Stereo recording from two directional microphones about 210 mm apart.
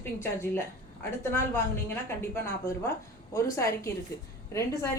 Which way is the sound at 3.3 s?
15° left (ahead or behind).